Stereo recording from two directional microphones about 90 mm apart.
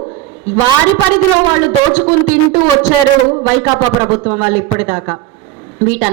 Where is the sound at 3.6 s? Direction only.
25° right (ahead or behind).